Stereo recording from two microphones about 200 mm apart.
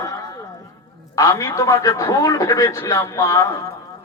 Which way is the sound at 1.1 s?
15° left (ahead or behind).